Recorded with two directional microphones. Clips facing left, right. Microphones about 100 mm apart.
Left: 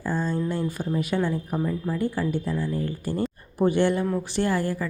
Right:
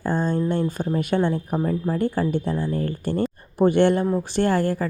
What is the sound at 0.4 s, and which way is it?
Speech, 55° right (ahead or behind).